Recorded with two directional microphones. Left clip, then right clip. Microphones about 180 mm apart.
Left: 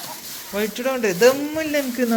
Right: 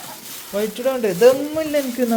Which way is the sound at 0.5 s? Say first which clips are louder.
Right 2 dB; 15° right (ahead or behind).